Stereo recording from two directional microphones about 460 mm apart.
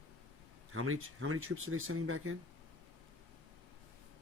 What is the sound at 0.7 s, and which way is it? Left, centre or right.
Speech, right.